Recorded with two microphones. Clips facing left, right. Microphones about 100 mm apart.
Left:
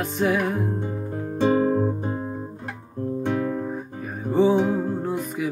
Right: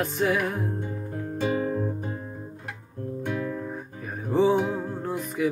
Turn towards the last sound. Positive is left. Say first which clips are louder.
# left 2 dB
turn(degrees=0)  # may be behind; listen again after turning